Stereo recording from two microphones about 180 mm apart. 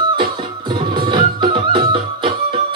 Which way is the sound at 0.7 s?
25° right (ahead or behind).